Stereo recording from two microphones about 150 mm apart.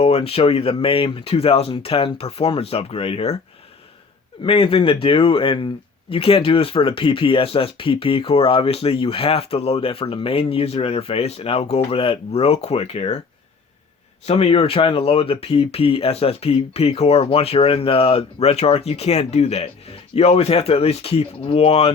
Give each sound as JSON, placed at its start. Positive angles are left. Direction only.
{"t": 0.0, "sound": "speech", "side_deg": 40}
{"t": 4.4, "sound": "speech", "side_deg": 35}
{"t": 14.3, "sound": "speech", "side_deg": 40}